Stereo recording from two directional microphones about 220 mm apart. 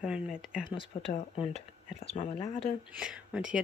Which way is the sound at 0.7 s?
25° left (ahead or behind).